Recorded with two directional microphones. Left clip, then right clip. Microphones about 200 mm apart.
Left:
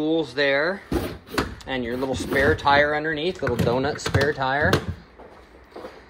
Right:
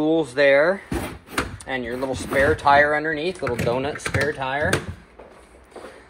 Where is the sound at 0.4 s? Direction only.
5° right (ahead or behind).